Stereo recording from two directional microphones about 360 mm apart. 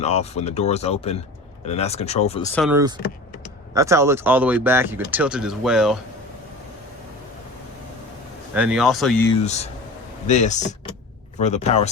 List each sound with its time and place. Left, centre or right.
0.0 s speech: centre
2.6 s speech: centre
8.5 s speech: centre
9.4 s speech: centre